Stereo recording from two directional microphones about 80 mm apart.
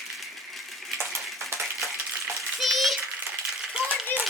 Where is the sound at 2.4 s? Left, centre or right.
Centre.